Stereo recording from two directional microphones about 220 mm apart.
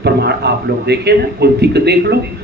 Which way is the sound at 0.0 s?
50° right (ahead or behind).